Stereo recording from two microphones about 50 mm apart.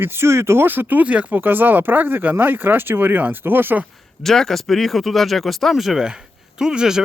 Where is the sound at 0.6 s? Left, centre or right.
Right.